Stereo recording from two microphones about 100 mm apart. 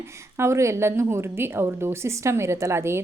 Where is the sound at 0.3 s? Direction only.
30° right (ahead or behind).